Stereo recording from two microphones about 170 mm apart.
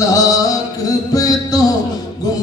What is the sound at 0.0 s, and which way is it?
Music, 20° left (ahead or behind).